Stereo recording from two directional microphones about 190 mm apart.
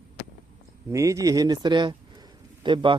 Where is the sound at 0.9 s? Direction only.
15° right (ahead or behind).